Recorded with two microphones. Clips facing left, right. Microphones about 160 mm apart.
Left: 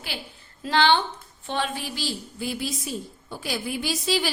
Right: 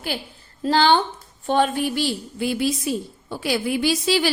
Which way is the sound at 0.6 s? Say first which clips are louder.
Right 3 dB; 40° right (ahead or behind).